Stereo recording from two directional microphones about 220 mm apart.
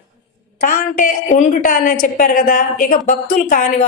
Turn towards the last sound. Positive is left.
turn(degrees=35)  # may be behind; listen again after turning